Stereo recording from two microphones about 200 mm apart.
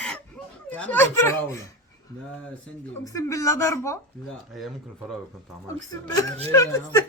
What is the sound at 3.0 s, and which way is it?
Speech, 15° left (ahead or behind).